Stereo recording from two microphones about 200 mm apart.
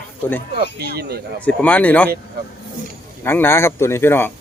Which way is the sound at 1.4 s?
5° left (ahead or behind).